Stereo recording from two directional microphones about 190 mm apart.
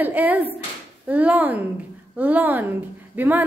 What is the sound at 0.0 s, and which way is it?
A woman's voice, 10° right (ahead or behind).